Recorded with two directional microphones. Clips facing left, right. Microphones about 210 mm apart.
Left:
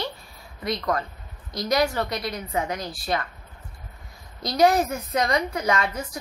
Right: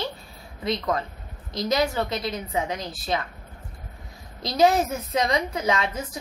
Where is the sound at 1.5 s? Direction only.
25° right (ahead or behind).